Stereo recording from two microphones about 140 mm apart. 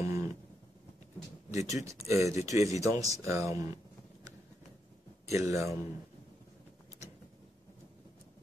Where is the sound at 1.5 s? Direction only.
25° right (ahead or behind).